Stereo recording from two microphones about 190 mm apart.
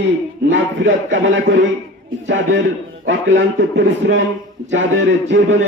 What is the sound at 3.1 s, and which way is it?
A man's voice, 70° right (ahead or behind).